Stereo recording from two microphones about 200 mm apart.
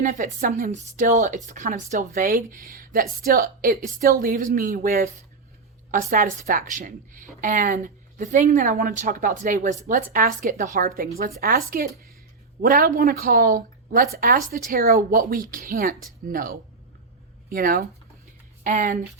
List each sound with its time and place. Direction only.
0.0 s a woman's voice: 40° right (ahead or behind)